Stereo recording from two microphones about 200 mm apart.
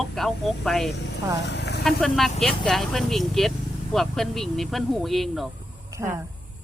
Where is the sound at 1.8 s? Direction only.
Centre (ahead or behind).